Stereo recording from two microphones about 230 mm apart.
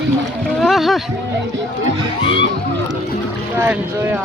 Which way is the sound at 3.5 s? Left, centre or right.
Centre.